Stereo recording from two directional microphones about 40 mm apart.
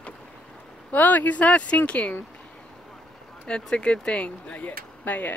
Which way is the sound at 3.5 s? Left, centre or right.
Left.